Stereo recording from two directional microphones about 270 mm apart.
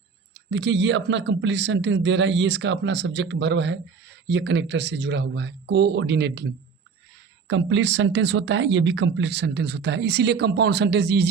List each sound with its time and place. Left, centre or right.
0.3 s speech: right